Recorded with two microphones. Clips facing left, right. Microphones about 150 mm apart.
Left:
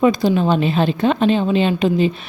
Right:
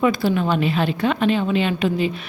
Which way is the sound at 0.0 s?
20° left (ahead or behind).